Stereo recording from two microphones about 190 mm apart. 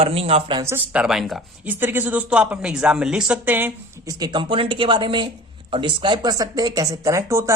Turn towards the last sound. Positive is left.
turn(degrees=-15)  # may be behind; listen again after turning